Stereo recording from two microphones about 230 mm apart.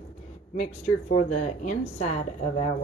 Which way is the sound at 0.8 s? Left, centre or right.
Left.